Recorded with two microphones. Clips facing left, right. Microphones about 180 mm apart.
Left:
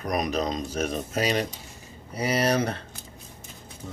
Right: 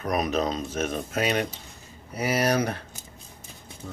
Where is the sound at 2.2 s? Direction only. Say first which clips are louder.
Even; 5° right (ahead or behind).